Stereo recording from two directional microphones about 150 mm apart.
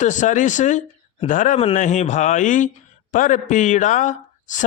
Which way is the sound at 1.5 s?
45° left (ahead or behind).